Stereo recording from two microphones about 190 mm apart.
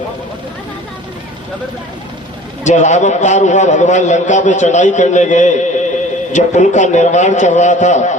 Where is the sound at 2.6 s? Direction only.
40° left (ahead or behind).